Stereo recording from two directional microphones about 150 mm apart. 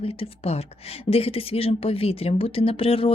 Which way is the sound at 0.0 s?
40° left (ahead or behind).